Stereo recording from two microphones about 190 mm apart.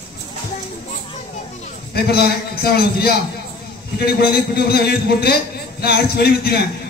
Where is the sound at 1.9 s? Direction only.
55° left (ahead or behind).